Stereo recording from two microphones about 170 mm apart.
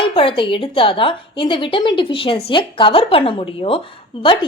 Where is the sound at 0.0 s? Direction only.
30° left (ahead or behind).